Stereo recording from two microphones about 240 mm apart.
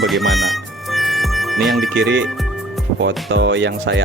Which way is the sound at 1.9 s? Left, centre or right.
Right.